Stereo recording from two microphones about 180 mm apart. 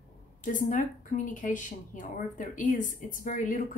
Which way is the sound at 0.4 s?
45° left (ahead or behind).